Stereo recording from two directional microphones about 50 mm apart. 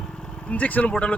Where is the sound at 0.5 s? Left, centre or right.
Left.